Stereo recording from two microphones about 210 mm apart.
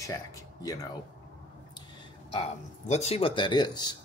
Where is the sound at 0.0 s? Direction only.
15° left (ahead or behind).